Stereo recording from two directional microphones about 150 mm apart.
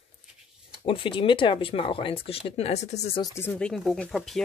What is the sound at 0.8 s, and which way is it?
Speech, 35° left (ahead or behind).